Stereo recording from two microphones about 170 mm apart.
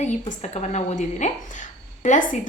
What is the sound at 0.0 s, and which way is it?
A woman's voice, 40° left (ahead or behind).